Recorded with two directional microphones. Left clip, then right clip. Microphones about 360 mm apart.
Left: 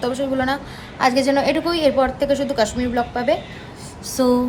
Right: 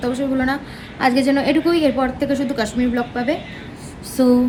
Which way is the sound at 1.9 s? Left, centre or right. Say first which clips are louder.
Left 2 dB; left.